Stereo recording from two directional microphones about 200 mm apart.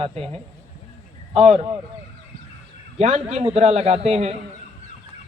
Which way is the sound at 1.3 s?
30° right (ahead or behind).